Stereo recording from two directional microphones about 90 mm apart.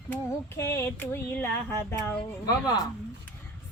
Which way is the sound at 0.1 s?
30° left (ahead or behind).